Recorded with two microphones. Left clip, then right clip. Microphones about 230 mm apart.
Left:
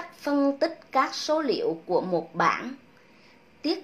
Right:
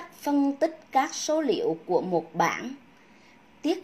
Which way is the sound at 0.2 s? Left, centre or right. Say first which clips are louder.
Left 1 dB; right.